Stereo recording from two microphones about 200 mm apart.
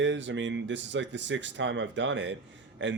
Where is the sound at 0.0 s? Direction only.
65° right (ahead or behind).